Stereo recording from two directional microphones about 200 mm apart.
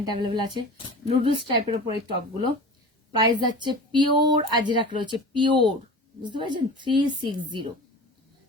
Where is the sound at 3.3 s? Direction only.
20° right (ahead or behind).